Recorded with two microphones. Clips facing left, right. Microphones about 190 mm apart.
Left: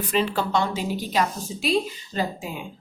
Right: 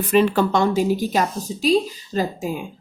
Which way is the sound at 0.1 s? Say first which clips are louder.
Right 7 dB; 55° right (ahead or behind).